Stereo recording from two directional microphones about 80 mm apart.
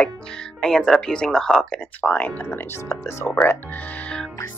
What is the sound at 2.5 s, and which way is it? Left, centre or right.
Speech, left.